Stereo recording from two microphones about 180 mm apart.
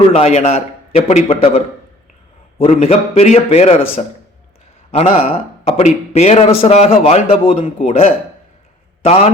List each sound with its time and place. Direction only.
0.1 s speech: 35° left (ahead or behind)
2.8 s a man's voice: 35° left (ahead or behind)